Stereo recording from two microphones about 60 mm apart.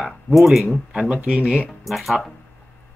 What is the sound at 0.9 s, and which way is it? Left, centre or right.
Speech, centre.